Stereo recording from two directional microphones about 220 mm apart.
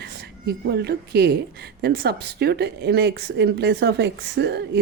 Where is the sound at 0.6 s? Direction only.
45° right (ahead or behind).